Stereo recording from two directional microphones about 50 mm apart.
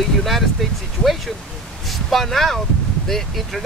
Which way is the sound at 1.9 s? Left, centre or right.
Centre.